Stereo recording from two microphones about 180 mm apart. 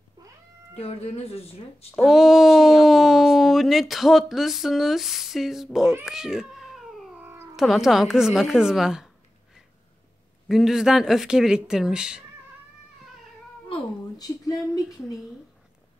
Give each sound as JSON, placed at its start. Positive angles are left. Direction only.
{"t": 0.7, "sound": "speech", "side_deg": 35}
{"t": 2.0, "sound": "speech", "side_deg": 0}
{"t": 10.5, "sound": "speech", "side_deg": -5}
{"t": 13.7, "sound": "speech", "side_deg": 20}